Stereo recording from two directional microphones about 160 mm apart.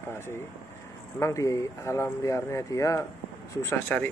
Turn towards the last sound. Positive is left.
turn(degrees=10)  # may be behind; listen again after turning